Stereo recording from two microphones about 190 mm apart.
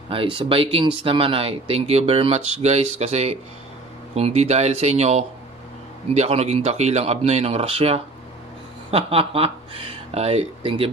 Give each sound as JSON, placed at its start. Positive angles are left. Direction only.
{"t": 0.1, "sound": "speech", "side_deg": -30}